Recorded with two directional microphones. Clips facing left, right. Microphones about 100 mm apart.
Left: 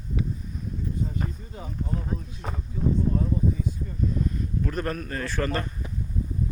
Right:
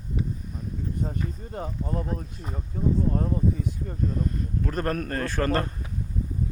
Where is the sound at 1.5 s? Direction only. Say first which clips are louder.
Right 2 dB; 50° right (ahead or behind).